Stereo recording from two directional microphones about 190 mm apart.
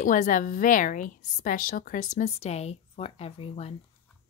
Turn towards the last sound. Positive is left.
turn(degrees=30)  # may be behind; listen again after turning